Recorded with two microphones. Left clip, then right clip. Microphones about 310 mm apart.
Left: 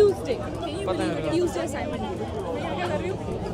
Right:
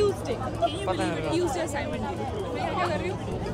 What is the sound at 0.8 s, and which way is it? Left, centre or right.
Speech, centre.